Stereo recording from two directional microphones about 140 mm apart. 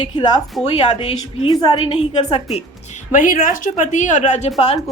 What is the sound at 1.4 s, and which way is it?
Speech, 30° left (ahead or behind).